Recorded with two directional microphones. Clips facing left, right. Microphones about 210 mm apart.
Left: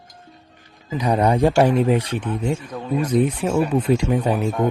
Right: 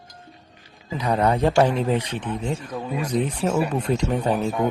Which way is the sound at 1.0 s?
15° left (ahead or behind).